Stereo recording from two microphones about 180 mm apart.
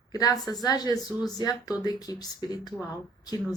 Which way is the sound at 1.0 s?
Centre (ahead or behind).